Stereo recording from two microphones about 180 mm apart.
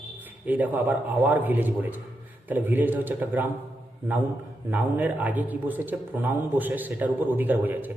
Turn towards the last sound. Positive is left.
turn(degrees=-10)  # may be behind; listen again after turning